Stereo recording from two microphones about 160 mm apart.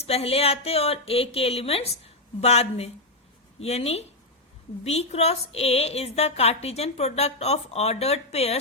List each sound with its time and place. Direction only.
0.0 s a woman's voice: 40° left (ahead or behind)